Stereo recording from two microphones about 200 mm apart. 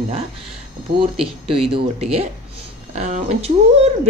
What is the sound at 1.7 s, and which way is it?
Speech, 30° right (ahead or behind).